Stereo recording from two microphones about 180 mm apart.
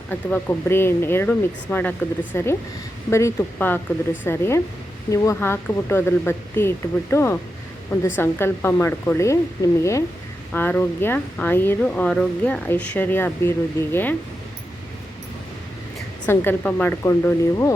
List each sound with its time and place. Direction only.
0.1 s speech: 10° left (ahead or behind)
10.5 s speech: 10° left (ahead or behind)
16.2 s speech: 10° left (ahead or behind)